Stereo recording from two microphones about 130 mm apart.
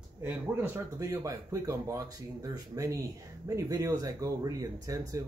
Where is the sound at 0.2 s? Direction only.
15° right (ahead or behind).